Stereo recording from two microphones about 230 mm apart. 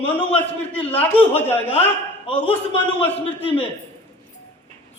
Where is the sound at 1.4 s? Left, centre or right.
Centre.